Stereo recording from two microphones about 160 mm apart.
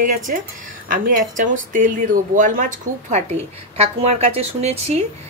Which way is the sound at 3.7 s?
40° right (ahead or behind).